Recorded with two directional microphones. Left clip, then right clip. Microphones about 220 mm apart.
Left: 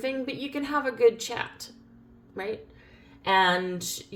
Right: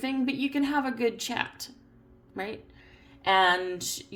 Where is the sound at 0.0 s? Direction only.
45° right (ahead or behind).